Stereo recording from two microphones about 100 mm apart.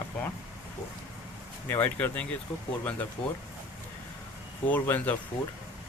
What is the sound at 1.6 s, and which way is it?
Speech, 20° left (ahead or behind).